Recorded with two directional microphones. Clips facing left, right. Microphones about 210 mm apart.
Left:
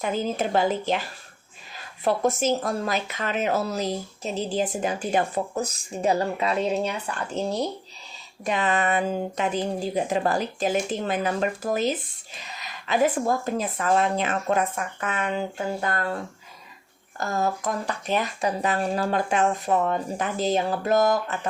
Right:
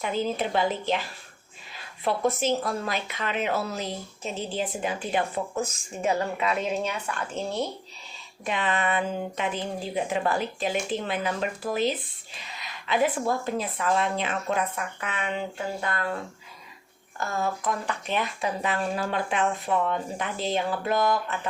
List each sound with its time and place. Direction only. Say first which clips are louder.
0.0 s a woman's voice: left 2 dB; 45° left (ahead or behind)
17.2 s a woman's voice: left 3 dB; 40° left (ahead or behind)